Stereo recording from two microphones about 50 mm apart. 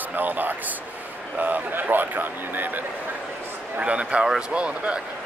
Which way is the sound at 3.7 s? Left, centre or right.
Right.